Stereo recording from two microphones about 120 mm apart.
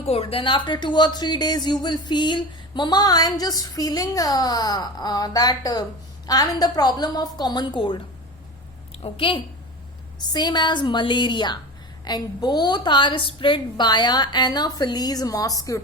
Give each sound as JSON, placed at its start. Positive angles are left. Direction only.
{"t": 0.1, "sound": "a woman's voice", "side_deg": 50}
{"t": 9.0, "sound": "a woman's voice", "side_deg": 50}
{"t": 10.2, "sound": "a woman's voice", "side_deg": 35}